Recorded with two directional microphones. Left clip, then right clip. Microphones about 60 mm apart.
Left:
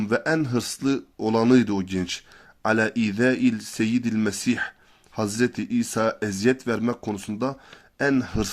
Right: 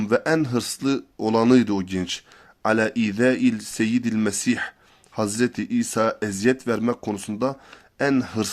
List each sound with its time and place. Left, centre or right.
0.0 s speech: right